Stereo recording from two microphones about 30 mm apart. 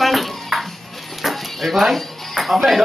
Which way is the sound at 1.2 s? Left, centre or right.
Centre.